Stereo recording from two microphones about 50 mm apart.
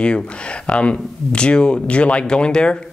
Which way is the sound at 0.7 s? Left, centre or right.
Left.